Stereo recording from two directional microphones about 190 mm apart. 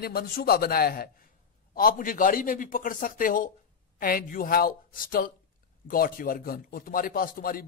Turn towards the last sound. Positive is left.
turn(degrees=50)  # may be behind; listen again after turning